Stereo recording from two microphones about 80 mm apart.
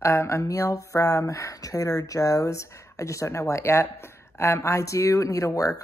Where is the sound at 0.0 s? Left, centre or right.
Left.